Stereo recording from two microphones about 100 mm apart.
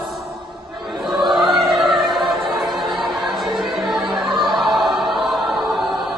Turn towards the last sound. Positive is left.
turn(degrees=0)  # may be behind; listen again after turning